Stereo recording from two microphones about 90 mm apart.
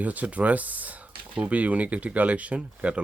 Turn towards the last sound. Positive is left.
turn(degrees=-15)  # may be behind; listen again after turning